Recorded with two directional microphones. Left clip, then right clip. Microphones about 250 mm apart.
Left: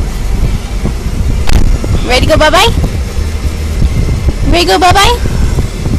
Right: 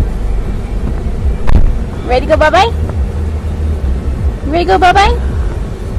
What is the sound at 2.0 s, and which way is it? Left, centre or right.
Speech, left.